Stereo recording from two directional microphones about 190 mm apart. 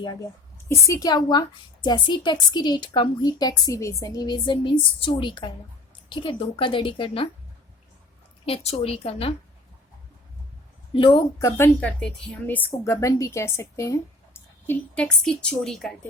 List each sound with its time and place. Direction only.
0.0 s a woman's voice: 20° left (ahead or behind)
8.4 s a woman's voice: 30° left (ahead or behind)
10.9 s a woman's voice: 25° left (ahead or behind); by 15.9 s centre (ahead or behind)